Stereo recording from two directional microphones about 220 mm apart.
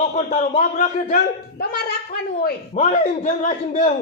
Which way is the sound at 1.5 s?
45° left (ahead or behind).